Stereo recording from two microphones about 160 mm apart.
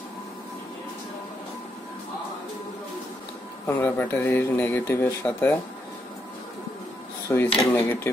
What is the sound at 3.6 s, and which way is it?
Speech, 10° left (ahead or behind).